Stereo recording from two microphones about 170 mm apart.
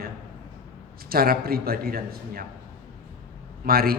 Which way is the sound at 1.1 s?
60° right (ahead or behind).